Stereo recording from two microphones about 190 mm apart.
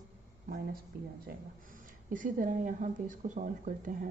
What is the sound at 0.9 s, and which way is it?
Speech, 50° right (ahead or behind).